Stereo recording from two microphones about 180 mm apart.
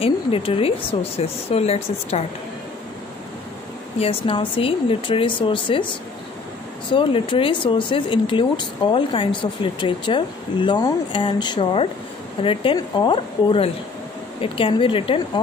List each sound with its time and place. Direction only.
0.0 s speech: 30° left (ahead or behind)
4.0 s speech: 30° left (ahead or behind)